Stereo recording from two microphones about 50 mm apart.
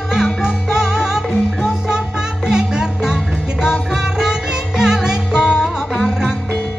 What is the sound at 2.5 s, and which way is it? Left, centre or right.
Music, centre.